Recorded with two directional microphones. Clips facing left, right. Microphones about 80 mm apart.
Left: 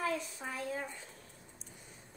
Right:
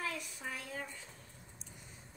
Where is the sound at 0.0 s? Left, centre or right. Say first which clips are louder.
Left 5 dB; left.